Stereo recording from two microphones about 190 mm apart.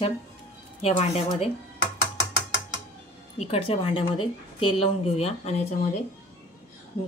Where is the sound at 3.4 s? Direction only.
30° left (ahead or behind).